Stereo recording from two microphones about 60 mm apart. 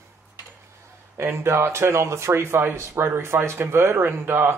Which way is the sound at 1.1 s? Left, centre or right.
Right.